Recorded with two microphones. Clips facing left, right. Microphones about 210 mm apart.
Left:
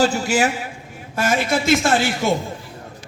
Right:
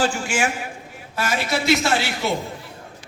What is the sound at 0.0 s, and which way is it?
A man's voice, 40° left (ahead or behind).